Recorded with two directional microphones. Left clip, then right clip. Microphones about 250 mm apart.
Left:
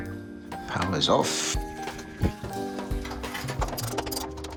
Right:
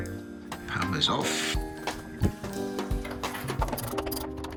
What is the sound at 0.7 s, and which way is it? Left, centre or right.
Music, left.